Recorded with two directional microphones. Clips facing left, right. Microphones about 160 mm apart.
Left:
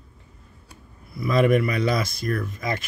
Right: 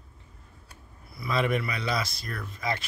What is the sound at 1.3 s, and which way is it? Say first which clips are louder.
Speech: left 8 dB; 50° left (ahead or behind).